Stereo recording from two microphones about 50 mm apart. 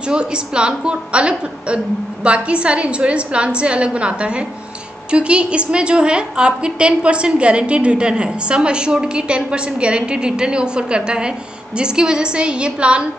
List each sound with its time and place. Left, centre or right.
0.0 s a woman's voice: centre